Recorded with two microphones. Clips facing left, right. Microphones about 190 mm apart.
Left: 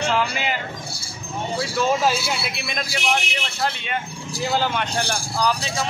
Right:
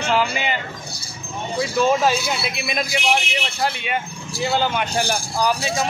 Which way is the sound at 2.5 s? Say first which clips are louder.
Right 4 dB; 5° right (ahead or behind).